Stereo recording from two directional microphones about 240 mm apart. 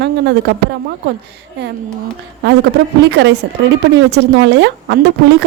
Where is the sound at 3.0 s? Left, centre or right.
Right.